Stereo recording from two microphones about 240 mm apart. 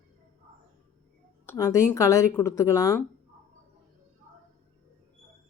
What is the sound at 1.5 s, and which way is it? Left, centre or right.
Speech, centre.